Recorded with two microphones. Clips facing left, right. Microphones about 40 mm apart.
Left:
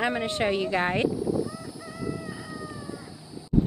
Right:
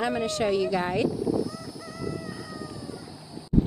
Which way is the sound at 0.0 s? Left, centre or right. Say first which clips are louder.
Even; left.